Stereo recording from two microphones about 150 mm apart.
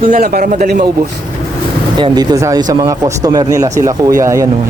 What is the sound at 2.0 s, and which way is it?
Speech, 25° right (ahead or behind).